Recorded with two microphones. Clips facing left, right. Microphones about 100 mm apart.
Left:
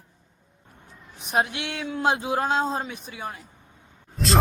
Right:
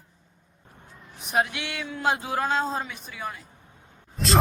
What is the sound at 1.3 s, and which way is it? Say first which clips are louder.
Speech: left 1 dB; 25° left (ahead or behind).